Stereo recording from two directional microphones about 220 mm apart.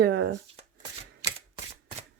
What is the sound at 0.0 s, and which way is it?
Speech, 50° right (ahead or behind).